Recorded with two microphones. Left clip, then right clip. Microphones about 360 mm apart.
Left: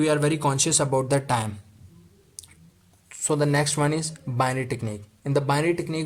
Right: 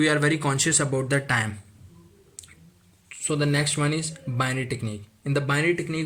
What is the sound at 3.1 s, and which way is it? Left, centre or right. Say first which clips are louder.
Speech: left 2 dB; centre.